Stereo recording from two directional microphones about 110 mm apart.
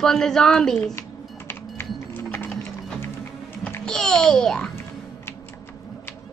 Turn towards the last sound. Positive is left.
turn(degrees=5)  # may be behind; listen again after turning